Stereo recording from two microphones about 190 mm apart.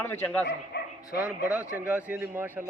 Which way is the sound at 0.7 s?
60° left (ahead or behind).